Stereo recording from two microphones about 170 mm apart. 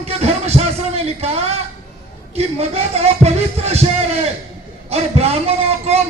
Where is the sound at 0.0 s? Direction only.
40° right (ahead or behind).